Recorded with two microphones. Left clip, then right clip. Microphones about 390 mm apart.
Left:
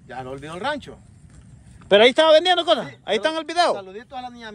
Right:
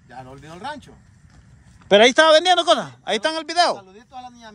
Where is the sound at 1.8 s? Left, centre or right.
Centre.